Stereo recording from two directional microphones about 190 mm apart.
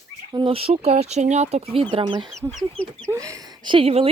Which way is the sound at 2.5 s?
5° left (ahead or behind).